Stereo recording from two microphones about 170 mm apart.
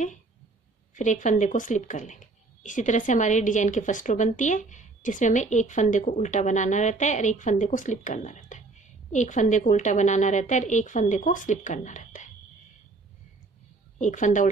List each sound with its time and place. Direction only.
0.9 s speech: 45° left (ahead or behind)
13.9 s speech: 45° left (ahead or behind)